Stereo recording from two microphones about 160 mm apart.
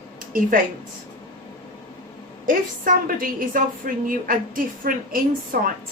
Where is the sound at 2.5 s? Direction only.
60° right (ahead or behind).